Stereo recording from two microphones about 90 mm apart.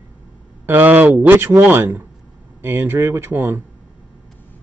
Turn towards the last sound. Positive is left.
turn(degrees=-25)  # may be behind; listen again after turning